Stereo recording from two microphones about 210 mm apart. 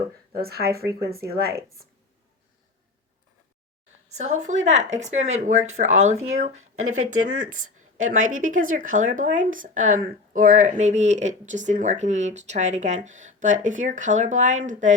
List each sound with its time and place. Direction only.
0.3 s speech: 45° right (ahead or behind)
4.2 s speech: 35° right (ahead or behind)
6.7 s speech: 85° right
7.9 s a woman's voice: 35° right (ahead or behind)